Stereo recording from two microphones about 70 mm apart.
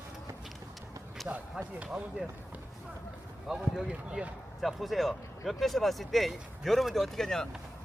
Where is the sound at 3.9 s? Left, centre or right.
Centre.